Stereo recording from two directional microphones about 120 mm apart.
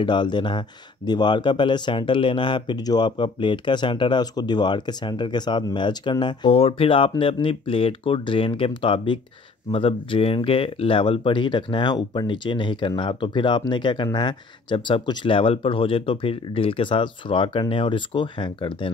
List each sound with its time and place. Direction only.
0.0 s speech: 40° left (ahead or behind)